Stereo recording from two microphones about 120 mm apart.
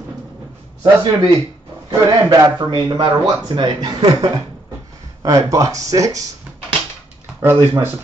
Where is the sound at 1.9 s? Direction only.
30° right (ahead or behind).